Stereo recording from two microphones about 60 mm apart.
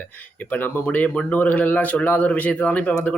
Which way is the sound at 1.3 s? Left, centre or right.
Left.